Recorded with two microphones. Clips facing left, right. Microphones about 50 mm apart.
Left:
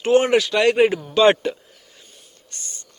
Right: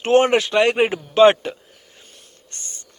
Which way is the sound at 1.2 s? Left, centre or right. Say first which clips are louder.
Right 2 dB; centre.